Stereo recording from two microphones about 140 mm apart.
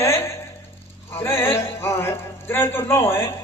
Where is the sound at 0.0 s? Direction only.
20° left (ahead or behind).